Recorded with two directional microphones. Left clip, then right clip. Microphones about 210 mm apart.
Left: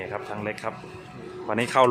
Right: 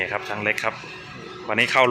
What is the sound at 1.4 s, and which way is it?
Speech, 20° left (ahead or behind).